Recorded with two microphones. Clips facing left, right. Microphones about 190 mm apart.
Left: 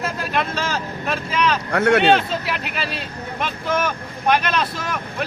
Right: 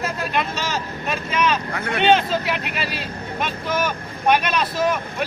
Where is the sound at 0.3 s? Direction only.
Centre (ahead or behind).